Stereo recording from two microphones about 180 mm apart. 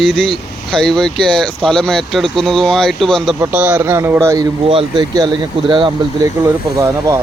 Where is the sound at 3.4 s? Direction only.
10° right (ahead or behind).